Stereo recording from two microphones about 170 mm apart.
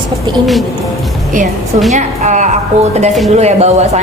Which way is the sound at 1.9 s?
45° right (ahead or behind).